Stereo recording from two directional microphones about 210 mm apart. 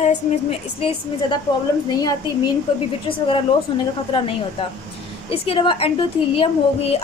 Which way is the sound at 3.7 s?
25° left (ahead or behind).